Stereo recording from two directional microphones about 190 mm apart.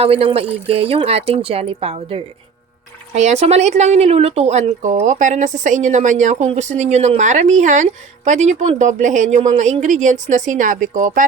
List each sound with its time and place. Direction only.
0.0 s speech: 30° right (ahead or behind)